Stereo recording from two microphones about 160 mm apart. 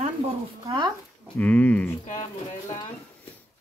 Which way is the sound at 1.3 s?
10° left (ahead or behind).